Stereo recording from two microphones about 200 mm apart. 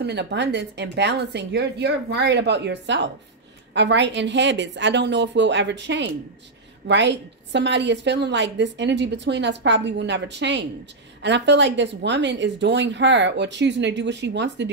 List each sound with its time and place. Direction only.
0.0 s a woman's voice: 55° right (ahead or behind)